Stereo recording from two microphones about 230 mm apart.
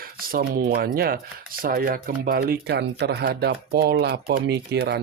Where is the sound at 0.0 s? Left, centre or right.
Right.